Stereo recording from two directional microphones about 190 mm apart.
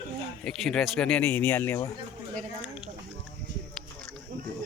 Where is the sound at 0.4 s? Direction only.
5° left (ahead or behind).